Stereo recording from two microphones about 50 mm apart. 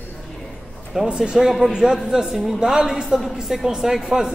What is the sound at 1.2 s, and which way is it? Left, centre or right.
A woman's voice, centre.